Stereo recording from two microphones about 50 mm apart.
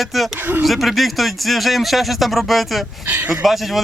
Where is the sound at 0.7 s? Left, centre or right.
Centre.